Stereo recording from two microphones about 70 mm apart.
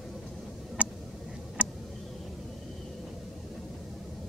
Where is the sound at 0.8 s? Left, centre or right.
Centre.